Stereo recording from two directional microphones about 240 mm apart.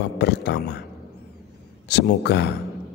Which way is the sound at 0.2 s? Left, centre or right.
Left.